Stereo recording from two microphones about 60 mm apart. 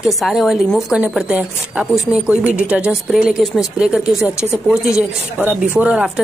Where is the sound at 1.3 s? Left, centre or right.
Centre.